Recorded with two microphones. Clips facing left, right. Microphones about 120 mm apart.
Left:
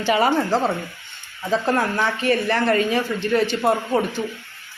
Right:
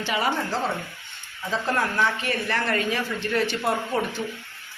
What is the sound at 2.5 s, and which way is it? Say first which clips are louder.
A man's voice: left 6 dB; 30° left (ahead or behind).